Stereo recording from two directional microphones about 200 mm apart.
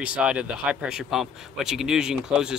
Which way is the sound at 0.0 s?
5° right (ahead or behind).